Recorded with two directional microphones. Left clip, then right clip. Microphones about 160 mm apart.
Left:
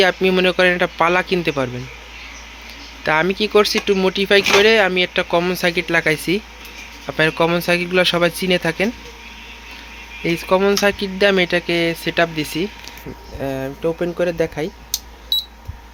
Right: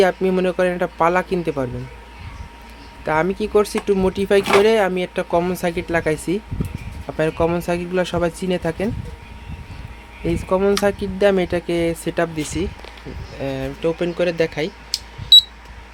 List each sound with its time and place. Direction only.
0.0 s speech: 5° right (ahead or behind)
3.1 s speech: 5° right (ahead or behind)
10.6 s speech: 5° right (ahead or behind)
15.3 s alarm clock: 15° left (ahead or behind)